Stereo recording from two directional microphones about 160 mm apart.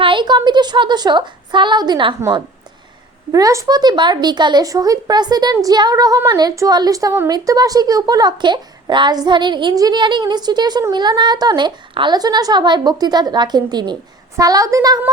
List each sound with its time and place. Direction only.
0.0 s a woman's voice: 30° right (ahead or behind)
3.3 s a woman's voice: 20° right (ahead or behind)